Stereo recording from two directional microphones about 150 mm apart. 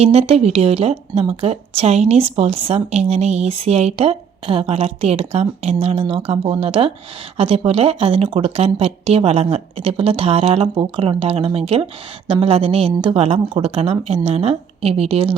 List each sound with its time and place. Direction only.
0.0 s a woman's voice: 45° right (ahead or behind)